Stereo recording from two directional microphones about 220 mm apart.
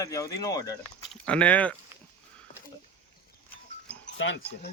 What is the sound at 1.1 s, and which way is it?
Speech, 5° left (ahead or behind).